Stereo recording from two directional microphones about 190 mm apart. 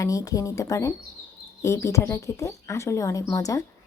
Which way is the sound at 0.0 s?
20° left (ahead or behind).